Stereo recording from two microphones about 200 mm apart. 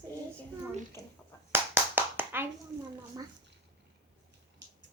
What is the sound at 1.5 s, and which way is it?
Clapping, 10° right (ahead or behind).